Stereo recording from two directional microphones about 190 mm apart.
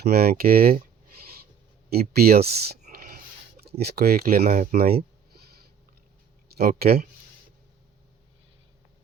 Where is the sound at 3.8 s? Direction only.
55° right (ahead or behind).